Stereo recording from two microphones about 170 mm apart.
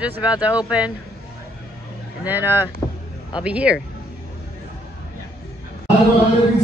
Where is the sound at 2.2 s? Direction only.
15° right (ahead or behind).